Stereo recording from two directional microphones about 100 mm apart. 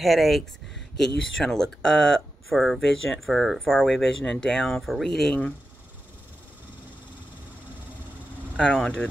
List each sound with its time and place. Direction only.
0.0 s speech: centre (ahead or behind)
8.7 s speech: 10° left (ahead or behind)